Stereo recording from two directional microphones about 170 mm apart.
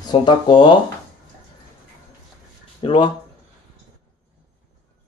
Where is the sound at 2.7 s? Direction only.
30° left (ahead or behind).